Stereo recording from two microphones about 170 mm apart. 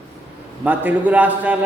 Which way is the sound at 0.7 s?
10° right (ahead or behind).